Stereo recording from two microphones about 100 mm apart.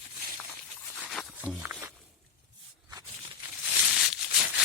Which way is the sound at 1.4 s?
15° right (ahead or behind).